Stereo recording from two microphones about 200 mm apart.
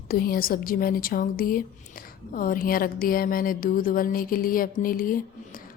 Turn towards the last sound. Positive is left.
turn(degrees=45)  # may be behind; listen again after turning